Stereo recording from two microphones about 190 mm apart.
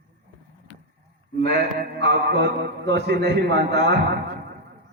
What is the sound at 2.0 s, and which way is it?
A man's voice, 65° right (ahead or behind).